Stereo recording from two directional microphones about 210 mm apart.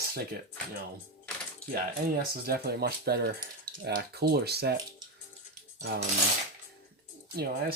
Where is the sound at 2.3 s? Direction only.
45° right (ahead or behind).